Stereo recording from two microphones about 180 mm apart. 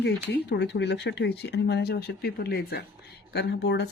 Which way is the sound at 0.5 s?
70° left (ahead or behind).